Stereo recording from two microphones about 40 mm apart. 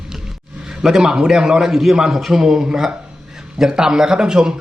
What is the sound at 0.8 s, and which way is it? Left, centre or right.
Speech, centre.